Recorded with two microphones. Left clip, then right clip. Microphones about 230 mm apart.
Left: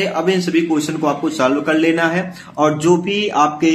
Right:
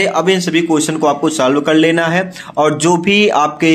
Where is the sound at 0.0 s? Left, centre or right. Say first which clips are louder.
Right 4 dB; right.